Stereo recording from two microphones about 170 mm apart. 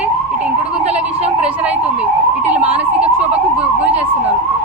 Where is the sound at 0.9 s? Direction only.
40° right (ahead or behind).